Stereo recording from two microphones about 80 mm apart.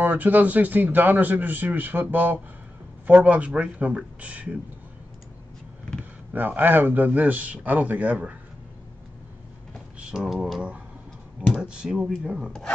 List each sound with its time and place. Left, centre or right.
0.0 s speech: right
6.3 s speech: right
9.9 s speech: centre
11.6 s speech: centre